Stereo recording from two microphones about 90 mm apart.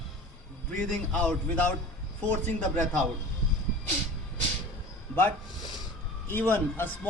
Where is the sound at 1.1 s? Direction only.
15° left (ahead or behind).